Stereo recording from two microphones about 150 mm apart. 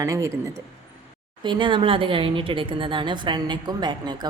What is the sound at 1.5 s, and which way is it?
A woman's voice, 30° right (ahead or behind).